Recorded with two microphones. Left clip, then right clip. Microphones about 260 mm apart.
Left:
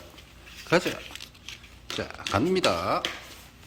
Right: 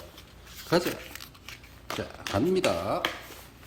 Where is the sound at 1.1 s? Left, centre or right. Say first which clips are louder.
Left 2 dB; centre.